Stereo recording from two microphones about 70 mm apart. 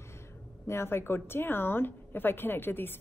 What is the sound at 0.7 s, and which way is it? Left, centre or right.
A woman's voice, left.